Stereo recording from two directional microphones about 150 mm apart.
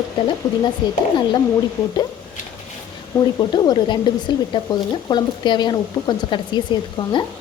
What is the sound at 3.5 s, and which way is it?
Speech, 30° left (ahead or behind).